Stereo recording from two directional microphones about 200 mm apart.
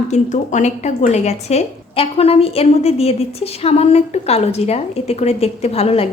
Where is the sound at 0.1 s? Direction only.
35° left (ahead or behind).